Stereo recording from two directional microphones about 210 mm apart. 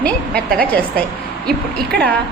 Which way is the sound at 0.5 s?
5° left (ahead or behind).